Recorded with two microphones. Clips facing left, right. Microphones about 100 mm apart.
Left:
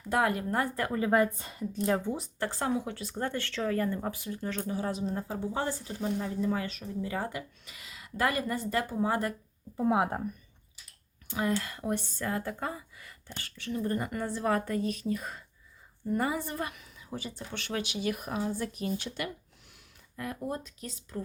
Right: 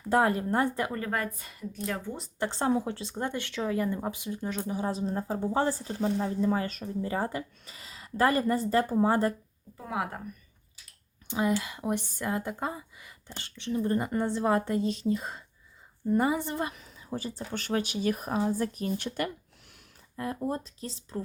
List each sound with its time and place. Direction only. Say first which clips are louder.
0.1 s speech: right 3 dB; 30° right (ahead or behind)
0.9 s a woman's voice: left 4 dB; 10° left (ahead or behind)
1.1 s a woman's voice: left 7 dB; 25° left (ahead or behind)
2.4 s speech: right 5 dB; 25° right (ahead or behind)
4.9 s speech: right 2 dB; 35° right (ahead or behind)
9.7 s a woman's voice: left 6 dB; 25° left (ahead or behind)
11.3 s speech: right 3 dB; 15° right (ahead or behind)
16.7 s speech: right 4 dB; 35° right (ahead or behind)
20.1 s speech: right 4 dB; 30° right (ahead or behind)